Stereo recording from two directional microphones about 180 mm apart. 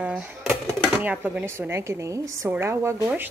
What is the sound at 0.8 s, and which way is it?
Speech, 10° right (ahead or behind).